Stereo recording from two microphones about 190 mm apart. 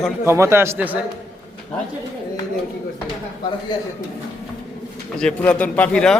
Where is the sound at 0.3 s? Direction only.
15° right (ahead or behind).